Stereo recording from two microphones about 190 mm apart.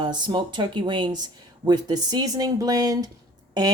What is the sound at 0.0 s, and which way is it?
Speech, 25° right (ahead or behind).